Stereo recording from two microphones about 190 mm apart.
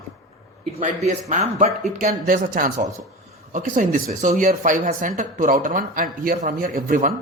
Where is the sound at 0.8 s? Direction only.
40° right (ahead or behind).